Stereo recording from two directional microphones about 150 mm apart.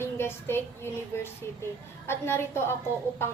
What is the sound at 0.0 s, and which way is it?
Child singing, 15° left (ahead or behind).